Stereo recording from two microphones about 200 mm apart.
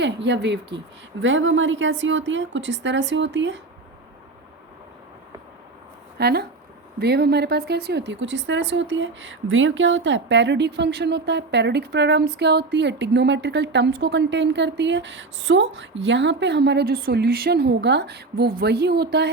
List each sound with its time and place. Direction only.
0.0 s a woman's voice: 60° right (ahead or behind)
1.2 s a woman's voice: 70° right (ahead or behind)
6.1 s a woman's voice: 55° right (ahead or behind)